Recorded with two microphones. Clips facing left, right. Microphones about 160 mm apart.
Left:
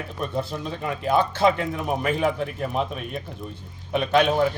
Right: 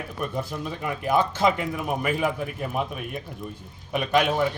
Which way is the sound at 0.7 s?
10° right (ahead or behind).